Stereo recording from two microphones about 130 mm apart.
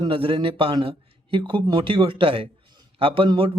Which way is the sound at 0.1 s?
45° right (ahead or behind).